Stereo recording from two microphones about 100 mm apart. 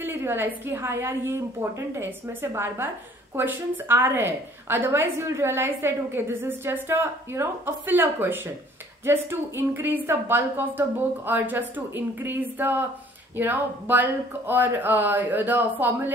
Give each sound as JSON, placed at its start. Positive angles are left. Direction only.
{"t": 0.0, "sound": "a woman's voice", "side_deg": -20}